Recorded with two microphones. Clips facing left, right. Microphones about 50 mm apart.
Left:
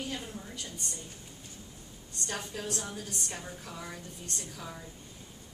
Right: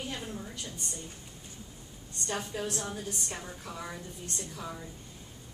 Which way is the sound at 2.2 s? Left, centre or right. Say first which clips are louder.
Right 3 dB; centre.